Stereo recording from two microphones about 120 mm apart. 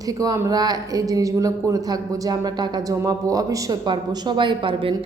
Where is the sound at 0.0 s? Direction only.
30° right (ahead or behind).